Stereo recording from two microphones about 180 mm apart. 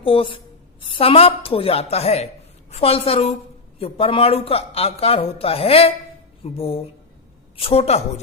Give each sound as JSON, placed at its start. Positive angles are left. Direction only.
{"t": 0.0, "sound": "a man's voice", "side_deg": 30}